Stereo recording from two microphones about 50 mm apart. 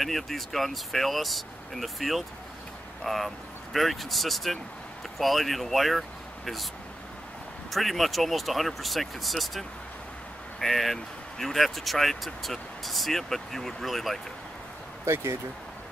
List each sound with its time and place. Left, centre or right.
0.0 s speech: centre
7.7 s speech: centre
15.1 s speech: right